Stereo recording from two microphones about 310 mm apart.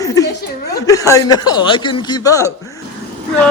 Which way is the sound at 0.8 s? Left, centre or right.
Centre.